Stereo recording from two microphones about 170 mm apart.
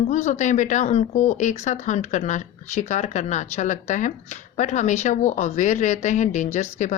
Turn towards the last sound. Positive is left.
turn(degrees=45)  # may be behind; listen again after turning